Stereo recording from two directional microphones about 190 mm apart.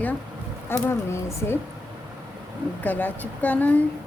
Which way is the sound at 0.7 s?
15° left (ahead or behind).